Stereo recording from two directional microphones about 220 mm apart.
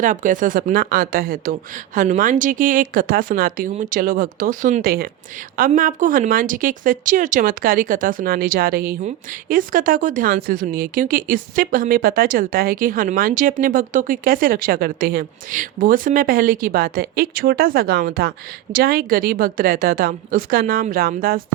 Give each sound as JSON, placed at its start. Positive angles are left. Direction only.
{"t": 0.0, "sound": "a woman's voice", "side_deg": -35}